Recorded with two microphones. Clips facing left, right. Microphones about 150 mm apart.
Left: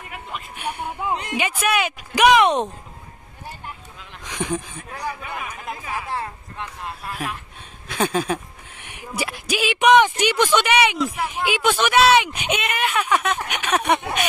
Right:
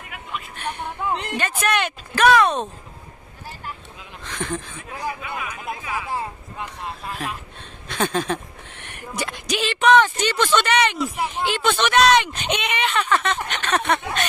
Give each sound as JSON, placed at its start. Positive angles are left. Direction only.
{"t": 0.6, "sound": "speech", "side_deg": 10}
{"t": 4.2, "sound": "a sound", "side_deg": 15}
{"t": 5.2, "sound": "speech", "side_deg": 40}
{"t": 7.9, "sound": "speech", "side_deg": 10}